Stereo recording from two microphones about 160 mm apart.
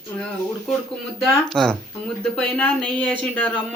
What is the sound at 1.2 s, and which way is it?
Speech, centre (ahead or behind).